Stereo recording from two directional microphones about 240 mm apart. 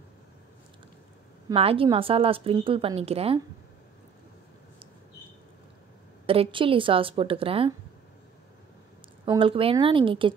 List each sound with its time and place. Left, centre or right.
1.5 s a woman's voice: right
6.2 s a woman's voice: right
9.2 s a woman's voice: right